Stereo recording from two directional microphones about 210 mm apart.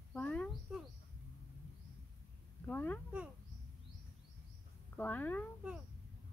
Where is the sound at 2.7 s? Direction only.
5° left (ahead or behind).